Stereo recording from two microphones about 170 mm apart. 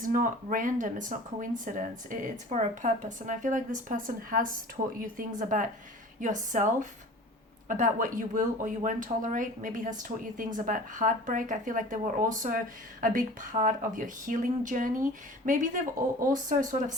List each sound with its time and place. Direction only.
0.0 s speech: 55° right (ahead or behind)